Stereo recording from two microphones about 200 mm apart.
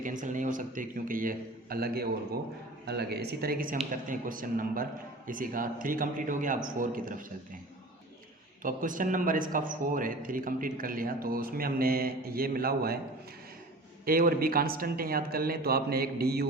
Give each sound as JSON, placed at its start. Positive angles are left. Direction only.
{"t": 0.0, "sound": "a man's voice", "side_deg": -40}
{"t": 8.6, "sound": "a man's voice", "side_deg": -40}
{"t": 14.0, "sound": "a man's voice", "side_deg": -45}